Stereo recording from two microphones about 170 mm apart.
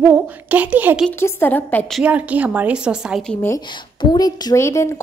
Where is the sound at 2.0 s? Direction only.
10° right (ahead or behind).